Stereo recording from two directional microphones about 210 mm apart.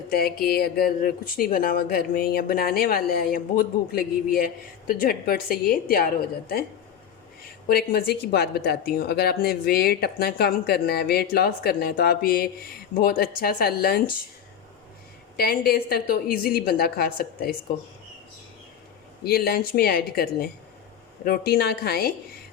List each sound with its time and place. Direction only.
0.1 s speech: 45° left (ahead or behind)
7.7 s speech: 45° left (ahead or behind)
15.4 s speech: 45° left (ahead or behind)
19.2 s speech: 45° left (ahead or behind)